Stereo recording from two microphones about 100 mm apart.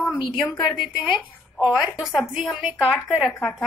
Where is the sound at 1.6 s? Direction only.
10° right (ahead or behind).